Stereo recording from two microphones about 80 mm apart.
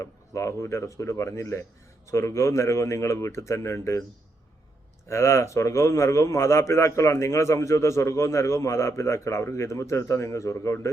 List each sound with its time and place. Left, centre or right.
0.0 s a man's voice: left
5.0 s a man's voice: left